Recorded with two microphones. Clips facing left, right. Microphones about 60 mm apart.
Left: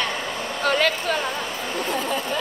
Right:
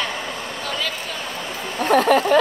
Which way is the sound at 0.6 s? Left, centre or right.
Left.